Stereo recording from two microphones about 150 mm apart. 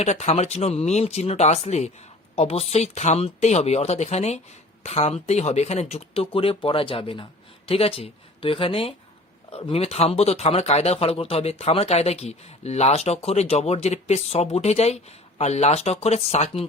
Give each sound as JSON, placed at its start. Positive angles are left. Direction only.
{"t": 0.0, "sound": "speech", "side_deg": 45}